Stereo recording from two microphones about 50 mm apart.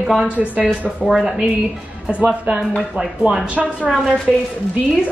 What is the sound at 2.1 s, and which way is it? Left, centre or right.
Speech, right.